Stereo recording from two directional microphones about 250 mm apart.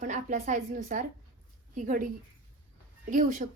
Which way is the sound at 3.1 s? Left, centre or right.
Right.